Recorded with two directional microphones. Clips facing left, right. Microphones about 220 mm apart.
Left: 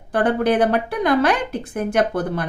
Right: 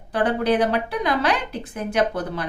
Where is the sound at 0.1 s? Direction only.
50° left (ahead or behind).